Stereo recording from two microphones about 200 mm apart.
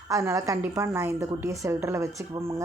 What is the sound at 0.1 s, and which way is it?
A woman's voice, 15° right (ahead or behind).